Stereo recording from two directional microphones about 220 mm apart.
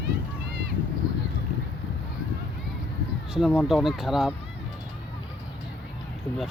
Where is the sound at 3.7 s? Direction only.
Centre (ahead or behind).